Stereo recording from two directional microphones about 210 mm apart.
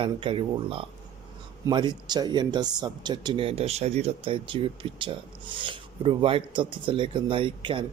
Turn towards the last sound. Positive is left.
turn(degrees=-25)  # may be behind; listen again after turning